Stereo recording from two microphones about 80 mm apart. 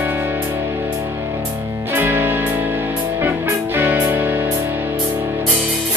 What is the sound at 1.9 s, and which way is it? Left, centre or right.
Music, right.